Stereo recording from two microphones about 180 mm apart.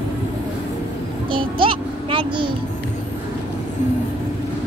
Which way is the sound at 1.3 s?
30° right (ahead or behind).